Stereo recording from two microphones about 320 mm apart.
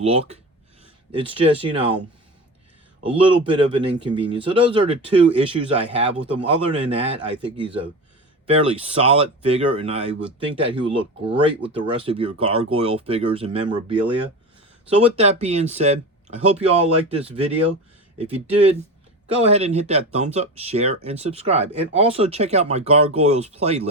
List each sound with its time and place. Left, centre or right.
0.0 s speech: centre
3.0 s speech: centre